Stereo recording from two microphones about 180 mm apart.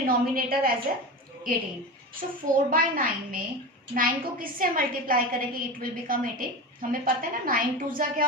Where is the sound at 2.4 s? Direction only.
50° right (ahead or behind).